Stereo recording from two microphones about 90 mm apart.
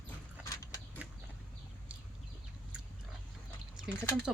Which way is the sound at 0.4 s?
40° left (ahead or behind).